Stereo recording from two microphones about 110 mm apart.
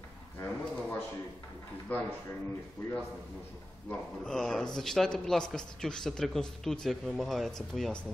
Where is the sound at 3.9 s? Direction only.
5° left (ahead or behind).